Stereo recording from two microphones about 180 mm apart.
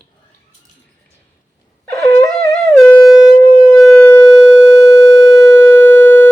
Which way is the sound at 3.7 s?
20° left (ahead or behind).